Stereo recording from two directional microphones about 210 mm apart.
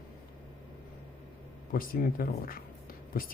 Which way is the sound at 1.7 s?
45° left (ahead or behind).